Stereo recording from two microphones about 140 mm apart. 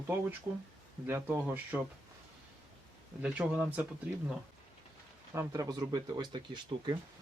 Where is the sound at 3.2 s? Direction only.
10° right (ahead or behind).